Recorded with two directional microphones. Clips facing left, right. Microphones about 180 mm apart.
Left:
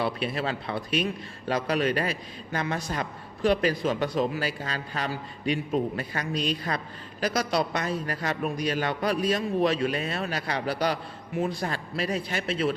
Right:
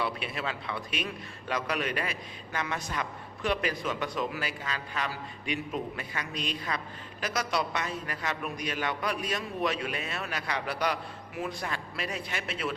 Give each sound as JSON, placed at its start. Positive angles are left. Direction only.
{"t": 0.0, "sound": "a man's voice", "side_deg": 35}